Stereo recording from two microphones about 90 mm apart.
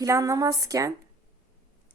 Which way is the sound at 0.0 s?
40° right (ahead or behind).